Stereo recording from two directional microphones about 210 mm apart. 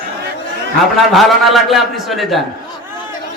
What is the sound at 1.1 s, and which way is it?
A man's voice, centre (ahead or behind).